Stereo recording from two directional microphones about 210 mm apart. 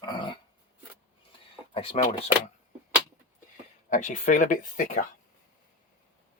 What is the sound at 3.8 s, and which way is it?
Speech, 35° left (ahead or behind).